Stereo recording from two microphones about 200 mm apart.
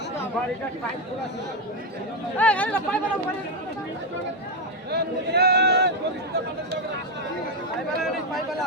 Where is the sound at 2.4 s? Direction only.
5° left (ahead or behind).